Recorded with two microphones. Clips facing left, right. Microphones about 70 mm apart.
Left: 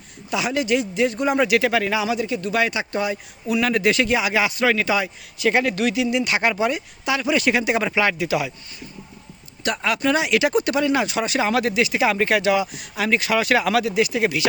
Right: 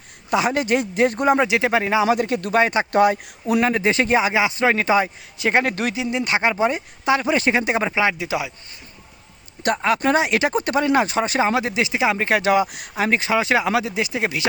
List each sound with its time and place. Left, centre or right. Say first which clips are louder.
0.3 s a man's voice: right 2 dB; right
1.4 s speech: even; right
2.0 s a man's voice: right 3 dB; right
2.6 s speech: right 4 dB; right
2.9 s a man's voice: right 8 dB; right
3.6 s speech: left 1 dB; right
5.6 s speech: left 2 dB; right
9.7 s speech: right 2 dB; right
12.4 s speech: right 2 dB; right